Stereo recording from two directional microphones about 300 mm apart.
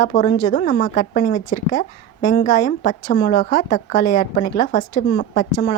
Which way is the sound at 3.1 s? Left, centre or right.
Left.